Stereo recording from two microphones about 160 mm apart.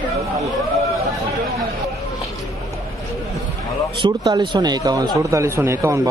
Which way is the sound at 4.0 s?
25° right (ahead or behind).